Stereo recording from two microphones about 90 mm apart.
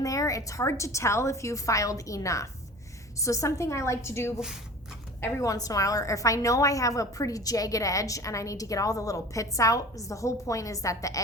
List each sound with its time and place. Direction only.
0.0 s a woman's voice: 40° left (ahead or behind)